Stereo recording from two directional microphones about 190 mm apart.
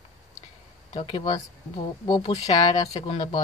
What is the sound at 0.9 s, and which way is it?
Speech, 30° left (ahead or behind).